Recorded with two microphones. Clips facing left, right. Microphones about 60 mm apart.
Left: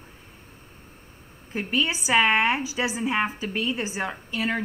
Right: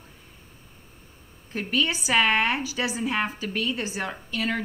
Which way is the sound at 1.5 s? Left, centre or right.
Centre.